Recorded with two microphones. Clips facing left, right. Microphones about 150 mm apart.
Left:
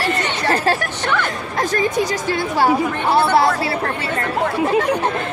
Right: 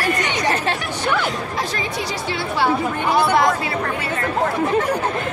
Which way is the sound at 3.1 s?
30° left (ahead or behind).